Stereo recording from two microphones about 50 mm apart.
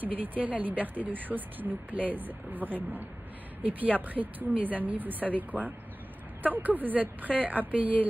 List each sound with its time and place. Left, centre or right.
0.0 s speech: right